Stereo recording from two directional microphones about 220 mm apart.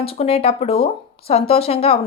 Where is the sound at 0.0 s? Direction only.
25° left (ahead or behind).